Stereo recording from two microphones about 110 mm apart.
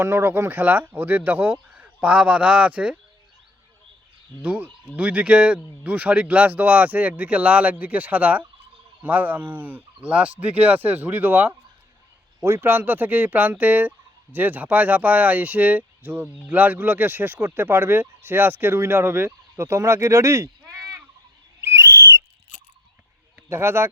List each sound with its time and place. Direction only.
0.0 s speech: 25° right (ahead or behind)
4.4 s speech: 15° right (ahead or behind); by 20.5 s 30° right (ahead or behind)
21.6 s whistle: 25° right (ahead or behind)
23.5 s speech: 25° right (ahead or behind)